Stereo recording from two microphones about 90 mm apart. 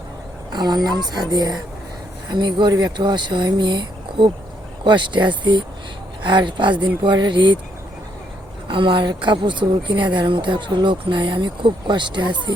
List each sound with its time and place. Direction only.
0.5 s a woman's voice: 50° right (ahead or behind)
8.6 s a woman's voice: 70° right (ahead or behind)